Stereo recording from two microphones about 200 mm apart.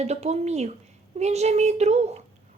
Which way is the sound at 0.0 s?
35° right (ahead or behind).